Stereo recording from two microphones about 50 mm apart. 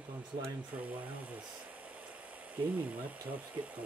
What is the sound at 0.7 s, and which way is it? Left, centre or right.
Speech, right.